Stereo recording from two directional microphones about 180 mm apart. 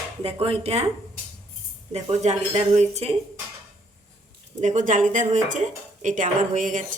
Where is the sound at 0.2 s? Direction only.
30° right (ahead or behind).